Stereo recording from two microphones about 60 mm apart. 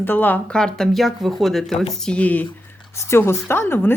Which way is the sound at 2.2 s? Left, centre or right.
Left.